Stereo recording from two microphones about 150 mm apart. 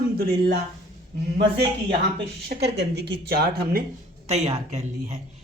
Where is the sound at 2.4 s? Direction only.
90° right.